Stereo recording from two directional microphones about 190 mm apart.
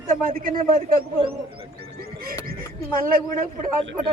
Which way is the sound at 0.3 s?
50° right (ahead or behind).